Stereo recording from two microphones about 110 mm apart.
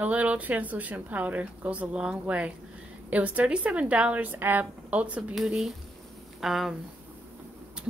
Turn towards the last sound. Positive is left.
turn(degrees=0)  # may be behind; listen again after turning